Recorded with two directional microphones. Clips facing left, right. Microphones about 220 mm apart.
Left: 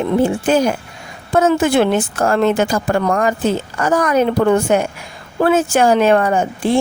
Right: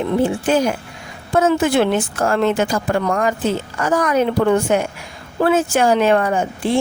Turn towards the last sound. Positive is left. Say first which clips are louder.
# left 3 dB
turn(degrees=45)  # may be behind; listen again after turning